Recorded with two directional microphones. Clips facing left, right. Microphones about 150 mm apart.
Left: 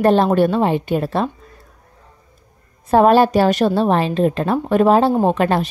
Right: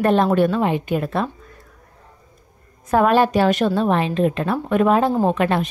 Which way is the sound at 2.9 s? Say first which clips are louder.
Left 4 dB; 30° left (ahead or behind).